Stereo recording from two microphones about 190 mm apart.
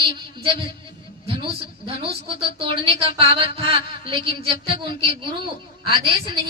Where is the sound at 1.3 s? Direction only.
30° right (ahead or behind).